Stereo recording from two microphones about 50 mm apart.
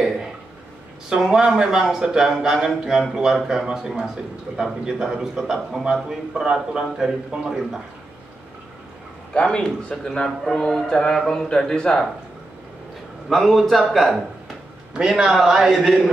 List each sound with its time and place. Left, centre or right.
1.2 s speech: centre
9.3 s a man's voice: left
10.1 s speech: centre
13.3 s a man's voice: centre
15.0 s speech: centre